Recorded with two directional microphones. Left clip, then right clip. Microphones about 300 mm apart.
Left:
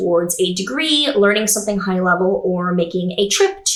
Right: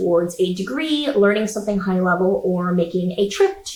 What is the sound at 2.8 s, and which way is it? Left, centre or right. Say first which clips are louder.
Speech: left 2 dB; centre.